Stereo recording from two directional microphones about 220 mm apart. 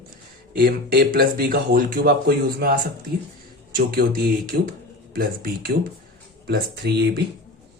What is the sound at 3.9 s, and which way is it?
Speech, 45° right (ahead or behind).